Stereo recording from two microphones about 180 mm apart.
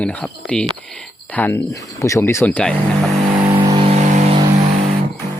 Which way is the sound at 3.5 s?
25° right (ahead or behind).